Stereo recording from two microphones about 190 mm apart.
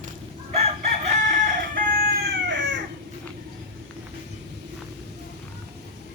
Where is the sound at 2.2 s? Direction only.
70° right (ahead or behind).